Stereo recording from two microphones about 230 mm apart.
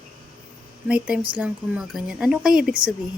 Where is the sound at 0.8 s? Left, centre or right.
Centre.